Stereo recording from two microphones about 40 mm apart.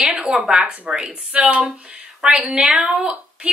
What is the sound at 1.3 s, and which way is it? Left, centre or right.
A woman's voice, right.